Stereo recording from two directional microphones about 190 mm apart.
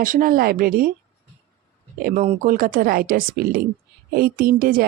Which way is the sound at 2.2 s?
40° right (ahead or behind).